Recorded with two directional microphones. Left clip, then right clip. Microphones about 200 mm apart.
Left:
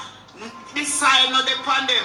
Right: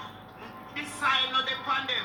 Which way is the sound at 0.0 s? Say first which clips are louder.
Left 6 dB; 55° left (ahead or behind).